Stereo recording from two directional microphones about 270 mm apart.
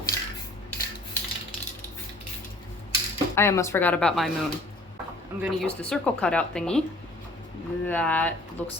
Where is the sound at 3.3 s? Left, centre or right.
Centre.